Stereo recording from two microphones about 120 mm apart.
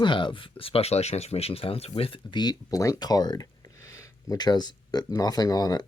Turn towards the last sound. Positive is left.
turn(degrees=30)  # may be behind; listen again after turning